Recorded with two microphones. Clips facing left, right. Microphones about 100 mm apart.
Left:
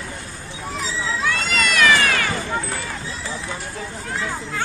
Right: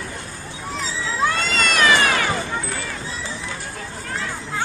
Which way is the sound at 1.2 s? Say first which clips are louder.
Right 1 dB; 30° right (ahead or behind).